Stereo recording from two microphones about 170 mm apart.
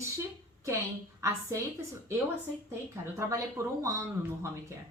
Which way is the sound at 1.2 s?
15° right (ahead or behind).